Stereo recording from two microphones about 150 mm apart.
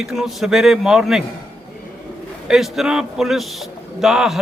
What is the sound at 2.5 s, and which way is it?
Speech, 5° right (ahead or behind).